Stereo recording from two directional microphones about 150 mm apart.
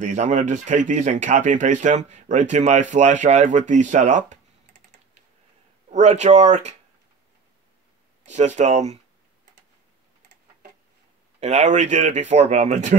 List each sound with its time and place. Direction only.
0.0 s speech: 55° right (ahead or behind)
5.9 s speech: 50° right (ahead or behind)
8.3 s speech: 50° right (ahead or behind)
11.3 s speech: 45° right (ahead or behind)